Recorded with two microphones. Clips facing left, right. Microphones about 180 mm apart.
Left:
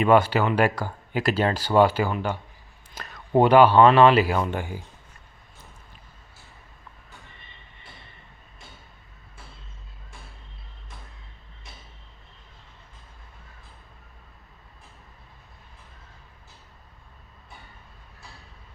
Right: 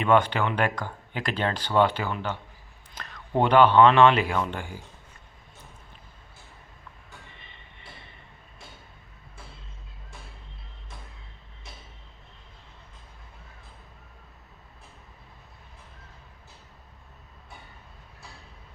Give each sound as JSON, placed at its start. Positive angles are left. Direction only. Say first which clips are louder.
{"t": 0.0, "sound": "speech", "louder": "left 3 dB", "side_deg": 5}
{"t": 3.0, "sound": "a sound", "louder": "left 2 dB", "side_deg": 10}
{"t": 3.4, "sound": "speech", "louder": "left 2 dB", "side_deg": 10}
{"t": 4.5, "sound": "speech", "louder": "left 5 dB", "side_deg": 15}